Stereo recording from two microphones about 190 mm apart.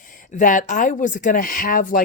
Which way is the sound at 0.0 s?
45° left (ahead or behind).